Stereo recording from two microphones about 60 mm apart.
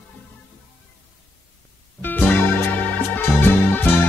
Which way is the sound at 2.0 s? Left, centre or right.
Left.